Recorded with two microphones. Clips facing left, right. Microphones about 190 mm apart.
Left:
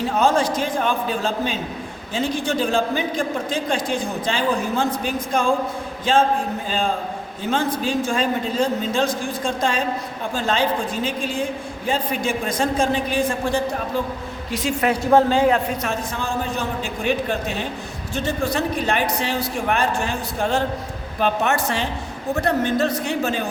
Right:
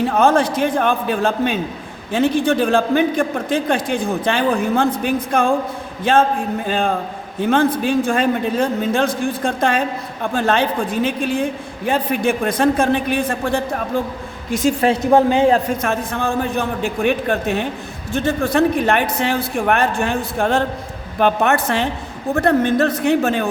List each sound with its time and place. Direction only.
0.2 s a man's voice: 55° right (ahead or behind)
6.7 s a man's voice: 60° right (ahead or behind)
14.5 s a woman's voice: 50° right (ahead or behind)
15.0 s a woman's voice: 20° right (ahead or behind)
15.8 s a man's voice: 55° right (ahead or behind)